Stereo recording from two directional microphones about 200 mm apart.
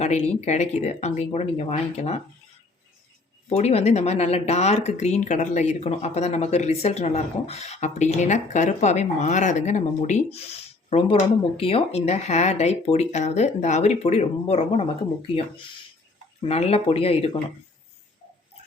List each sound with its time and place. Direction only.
0.0 s speech: 35° left (ahead or behind)
3.5 s speech: 30° left (ahead or behind)
16.4 s speech: 30° left (ahead or behind)